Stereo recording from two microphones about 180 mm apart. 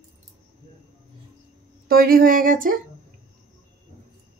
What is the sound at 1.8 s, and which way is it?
Speech, 55° right (ahead or behind).